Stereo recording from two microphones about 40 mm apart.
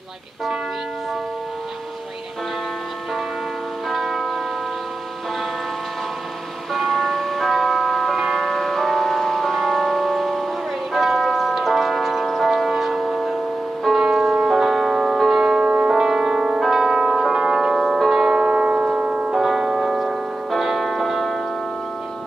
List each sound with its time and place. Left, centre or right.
3.9 s church bell: centre
6.7 s music: centre
10.9 s bell: centre
13.9 s music: centre
15.4 s music: right
15.9 s music: centre
18.4 s music: right
19.3 s music: centre
20.0 s music: centre